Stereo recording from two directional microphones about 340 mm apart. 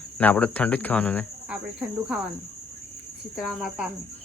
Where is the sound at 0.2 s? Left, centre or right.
Centre.